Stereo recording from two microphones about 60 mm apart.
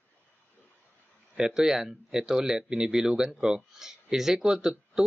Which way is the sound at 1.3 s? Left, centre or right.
Centre.